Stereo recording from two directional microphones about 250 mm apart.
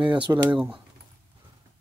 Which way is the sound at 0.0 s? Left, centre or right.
Centre.